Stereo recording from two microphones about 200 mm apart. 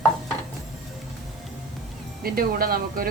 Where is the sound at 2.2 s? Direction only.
50° right (ahead or behind).